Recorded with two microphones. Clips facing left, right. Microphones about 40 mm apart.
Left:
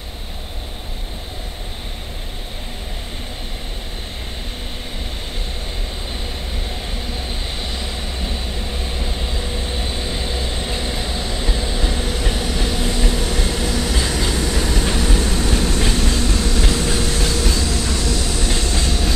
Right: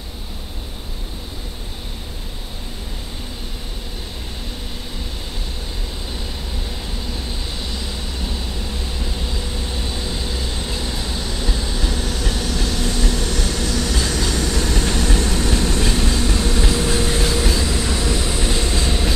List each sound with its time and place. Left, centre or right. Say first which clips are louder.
8.9 s vehicle: left 1 dB; left; by 16.6 s centre
16.6 s train: right 1 dB; centre
17.5 s train: right 1 dB; centre